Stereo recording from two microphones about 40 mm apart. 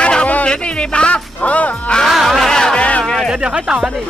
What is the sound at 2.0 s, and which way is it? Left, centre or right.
Music, centre.